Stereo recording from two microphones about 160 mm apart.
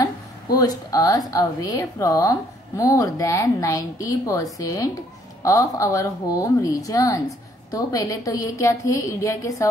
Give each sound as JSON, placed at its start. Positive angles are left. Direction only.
{"t": 0.0, "sound": "a woman's voice", "side_deg": 25}